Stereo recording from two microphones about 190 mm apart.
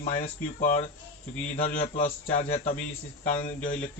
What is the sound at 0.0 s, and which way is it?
Speech, 35° left (ahead or behind).